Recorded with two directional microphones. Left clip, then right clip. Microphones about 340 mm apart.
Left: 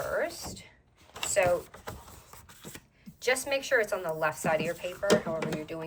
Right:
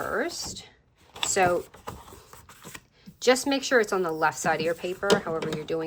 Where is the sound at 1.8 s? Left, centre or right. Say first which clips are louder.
Right 3 dB; centre.